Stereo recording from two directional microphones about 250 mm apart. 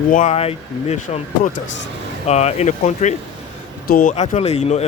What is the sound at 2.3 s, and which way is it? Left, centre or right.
Speech, left.